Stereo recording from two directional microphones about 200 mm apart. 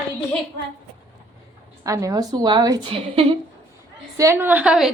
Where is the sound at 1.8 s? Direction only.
15° right (ahead or behind).